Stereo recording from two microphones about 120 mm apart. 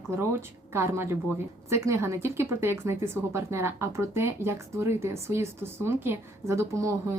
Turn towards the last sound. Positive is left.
turn(degrees=-25)  # may be behind; listen again after turning